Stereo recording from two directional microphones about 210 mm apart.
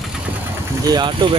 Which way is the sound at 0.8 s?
20° right (ahead or behind).